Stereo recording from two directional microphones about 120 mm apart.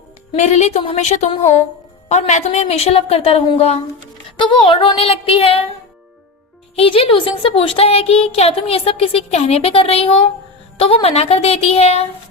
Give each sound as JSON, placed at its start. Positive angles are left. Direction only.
{"t": 0.3, "sound": "a woman's voice", "side_deg": 75}
{"t": 4.4, "sound": "child singing", "side_deg": 45}
{"t": 6.7, "sound": "speech", "side_deg": 50}